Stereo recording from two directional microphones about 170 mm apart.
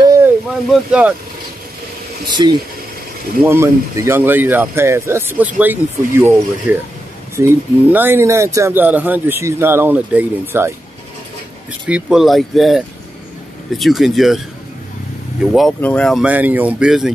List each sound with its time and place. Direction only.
0.7 s speech: 5° right (ahead or behind)
2.4 s speech: 25° right (ahead or behind)
11.9 s speech: 5° right (ahead or behind)
15.4 s speech: centre (ahead or behind)